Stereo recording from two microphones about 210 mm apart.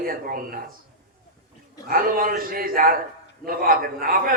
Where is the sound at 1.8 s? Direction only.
45° right (ahead or behind).